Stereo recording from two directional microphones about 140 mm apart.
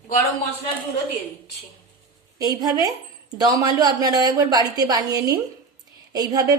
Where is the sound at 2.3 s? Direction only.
25° right (ahead or behind).